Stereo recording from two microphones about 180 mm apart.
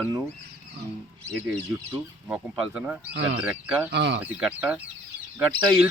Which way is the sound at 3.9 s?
75° right (ahead or behind).